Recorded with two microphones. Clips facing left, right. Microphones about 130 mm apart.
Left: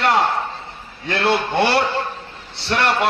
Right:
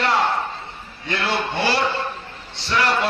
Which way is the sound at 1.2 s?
65° left (ahead or behind).